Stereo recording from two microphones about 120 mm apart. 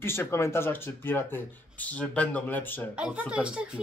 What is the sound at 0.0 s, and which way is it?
Speech, 20° left (ahead or behind).